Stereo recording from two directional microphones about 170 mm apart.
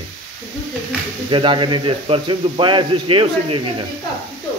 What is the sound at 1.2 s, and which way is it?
Speech, 30° right (ahead or behind).